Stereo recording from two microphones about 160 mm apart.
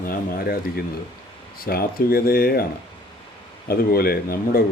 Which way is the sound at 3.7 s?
70° left (ahead or behind).